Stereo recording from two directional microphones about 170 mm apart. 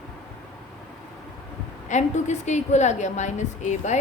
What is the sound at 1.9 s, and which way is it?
Speech, 45° left (ahead or behind).